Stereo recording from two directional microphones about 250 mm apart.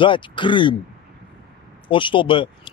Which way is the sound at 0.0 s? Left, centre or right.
Centre.